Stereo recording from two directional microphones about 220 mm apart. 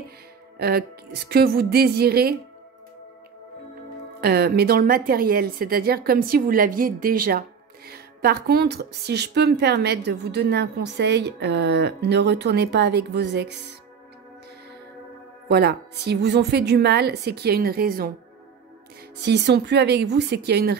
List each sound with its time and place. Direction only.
0.6 s a woman's voice: 45° right (ahead or behind)
4.2 s a woman's voice: 45° right (ahead or behind)
15.4 s a woman's voice: 50° right (ahead or behind)
19.2 s a woman's voice: 50° right (ahead or behind)